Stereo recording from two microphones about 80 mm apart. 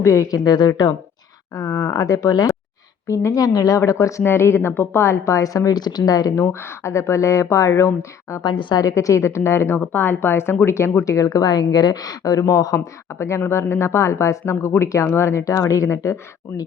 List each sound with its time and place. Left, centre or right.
0.0 s speech: left
0.3 s a woman's voice: left
3.8 s speech: left
6.4 s speech: left
8.4 s a woman's voice: left
8.8 s speech: left